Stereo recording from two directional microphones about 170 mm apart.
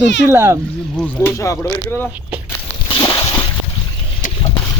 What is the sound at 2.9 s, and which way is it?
Slosh, 30° left (ahead or behind).